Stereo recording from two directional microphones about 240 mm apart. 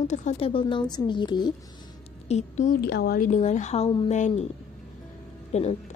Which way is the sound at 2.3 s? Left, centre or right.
Left.